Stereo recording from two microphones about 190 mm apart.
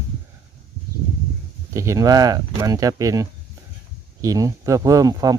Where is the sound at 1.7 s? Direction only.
15° right (ahead or behind).